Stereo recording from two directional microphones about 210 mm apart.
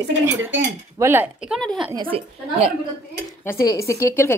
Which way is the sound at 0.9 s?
10° right (ahead or behind).